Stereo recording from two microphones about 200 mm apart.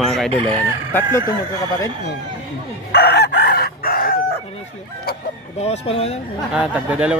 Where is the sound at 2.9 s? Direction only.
55° left (ahead or behind).